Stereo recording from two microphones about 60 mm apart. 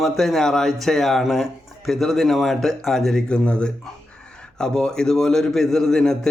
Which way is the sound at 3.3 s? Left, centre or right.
Centre.